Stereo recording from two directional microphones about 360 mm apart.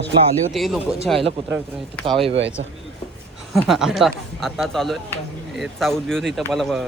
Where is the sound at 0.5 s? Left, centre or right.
Centre.